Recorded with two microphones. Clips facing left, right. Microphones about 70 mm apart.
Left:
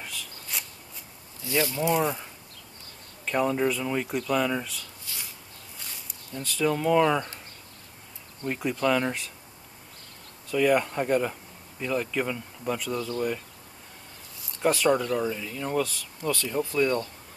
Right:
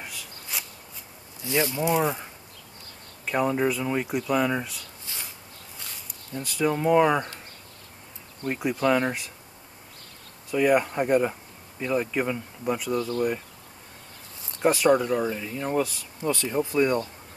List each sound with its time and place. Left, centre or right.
0.0 s a sound: centre
1.4 s speech: right; by 2.1 s centre
3.3 s speech: centre
5.8 s snake: centre
6.3 s speech: centre
8.5 s speech: centre
10.5 s speech: centre
14.6 s speech: centre